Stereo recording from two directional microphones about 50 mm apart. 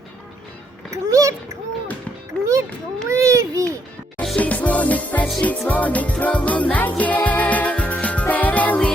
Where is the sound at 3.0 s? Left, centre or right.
Right.